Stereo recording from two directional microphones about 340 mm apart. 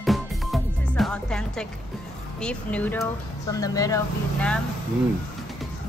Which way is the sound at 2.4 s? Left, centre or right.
Centre.